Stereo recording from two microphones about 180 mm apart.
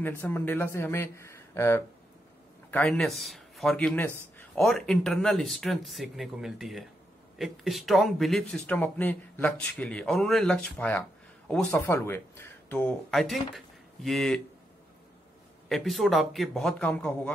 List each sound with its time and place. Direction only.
0.2 s speech: 10° left (ahead or behind)
2.7 s speech: 5° left (ahead or behind)
15.7 s speech: centre (ahead or behind)